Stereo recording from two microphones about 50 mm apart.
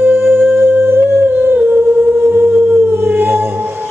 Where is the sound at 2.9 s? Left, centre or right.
Right.